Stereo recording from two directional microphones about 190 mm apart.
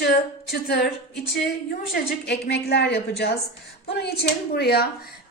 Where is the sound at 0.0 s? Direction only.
55° left (ahead or behind).